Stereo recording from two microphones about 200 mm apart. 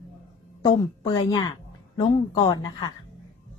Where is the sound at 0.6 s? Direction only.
20° left (ahead or behind).